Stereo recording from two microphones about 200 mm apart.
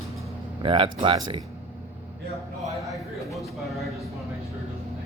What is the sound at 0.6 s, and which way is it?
Speech, 25° right (ahead or behind).